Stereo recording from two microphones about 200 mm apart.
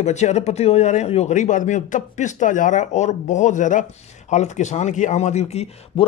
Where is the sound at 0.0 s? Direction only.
35° left (ahead or behind).